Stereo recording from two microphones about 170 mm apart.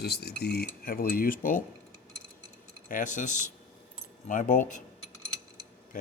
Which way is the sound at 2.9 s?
50° left (ahead or behind).